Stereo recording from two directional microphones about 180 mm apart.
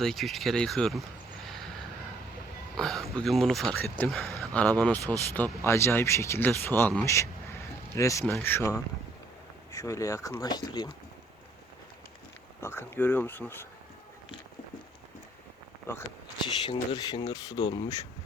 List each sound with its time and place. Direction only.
0.0 s speech: centre (ahead or behind)
2.7 s speech: centre (ahead or behind); by 10.9 s 20° left (ahead or behind)
12.5 s speech: 15° left (ahead or behind)
15.9 s speech: 15° left (ahead or behind)
16.6 s speech: 25° left (ahead or behind)